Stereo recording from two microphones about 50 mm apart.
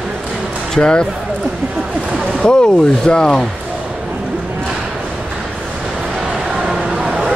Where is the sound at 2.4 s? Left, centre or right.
Centre.